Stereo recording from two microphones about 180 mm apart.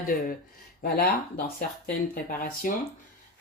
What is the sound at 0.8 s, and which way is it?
Speech, 55° left (ahead or behind).